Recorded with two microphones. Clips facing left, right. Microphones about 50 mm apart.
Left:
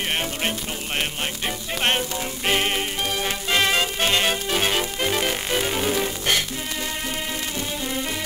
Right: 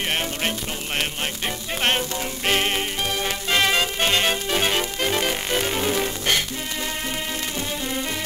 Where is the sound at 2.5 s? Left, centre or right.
Centre.